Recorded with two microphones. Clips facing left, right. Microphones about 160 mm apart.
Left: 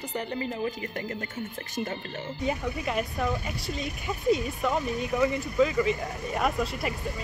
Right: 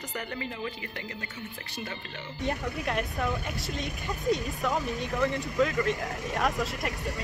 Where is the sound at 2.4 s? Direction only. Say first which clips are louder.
Left 1 dB; 5° left (ahead or behind).